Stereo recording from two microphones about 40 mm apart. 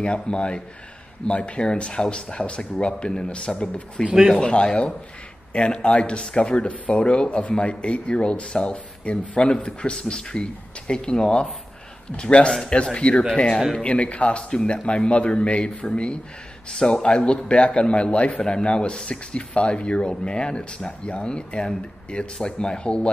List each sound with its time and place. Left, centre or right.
0.0 s speech: left
4.0 s speech: right
4.4 s speech: left
6.7 s speech: left
14.5 s speech: centre
14.9 s speech: left